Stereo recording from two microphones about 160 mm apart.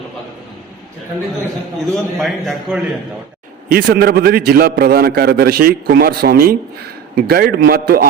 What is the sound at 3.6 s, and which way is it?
A man's voice, 70° right (ahead or behind).